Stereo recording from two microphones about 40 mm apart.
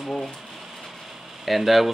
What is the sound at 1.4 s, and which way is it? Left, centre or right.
Speech, centre.